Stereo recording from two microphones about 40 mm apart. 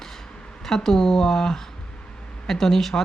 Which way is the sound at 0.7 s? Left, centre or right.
Centre.